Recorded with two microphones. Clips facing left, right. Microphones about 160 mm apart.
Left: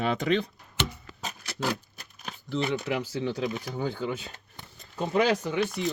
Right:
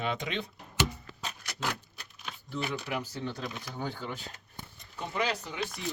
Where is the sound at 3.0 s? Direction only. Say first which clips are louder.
Left 7 dB; 90° left.